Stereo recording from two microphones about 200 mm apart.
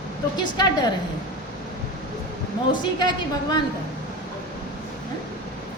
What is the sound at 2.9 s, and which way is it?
Speech, 20° left (ahead or behind).